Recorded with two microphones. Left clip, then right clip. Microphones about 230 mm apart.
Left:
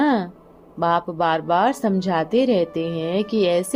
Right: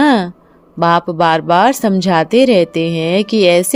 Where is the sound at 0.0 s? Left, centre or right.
Right.